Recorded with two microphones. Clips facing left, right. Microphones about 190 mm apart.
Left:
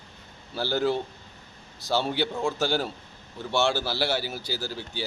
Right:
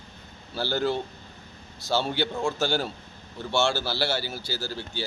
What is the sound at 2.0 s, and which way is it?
Speech, centre (ahead or behind).